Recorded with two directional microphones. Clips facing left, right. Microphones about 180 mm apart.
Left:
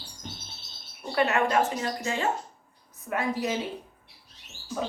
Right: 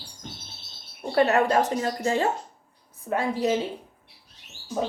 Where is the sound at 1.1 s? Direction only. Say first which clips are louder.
Right 4 dB; 35° right (ahead or behind).